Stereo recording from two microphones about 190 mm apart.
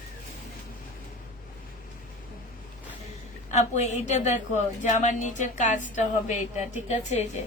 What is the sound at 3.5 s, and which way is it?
A woman's voice, 35° left (ahead or behind).